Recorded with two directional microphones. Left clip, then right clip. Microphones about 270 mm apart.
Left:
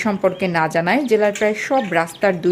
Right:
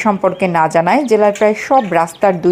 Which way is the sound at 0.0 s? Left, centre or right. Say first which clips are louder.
Right 5 dB; centre.